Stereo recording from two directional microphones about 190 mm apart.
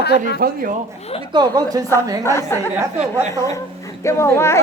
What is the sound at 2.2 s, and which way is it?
Speech, 15° left (ahead or behind).